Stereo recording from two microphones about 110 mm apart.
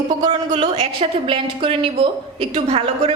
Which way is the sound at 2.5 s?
80° right.